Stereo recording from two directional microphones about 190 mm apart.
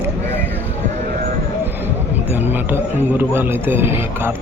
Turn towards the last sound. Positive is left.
turn(degrees=-10)  # may be behind; listen again after turning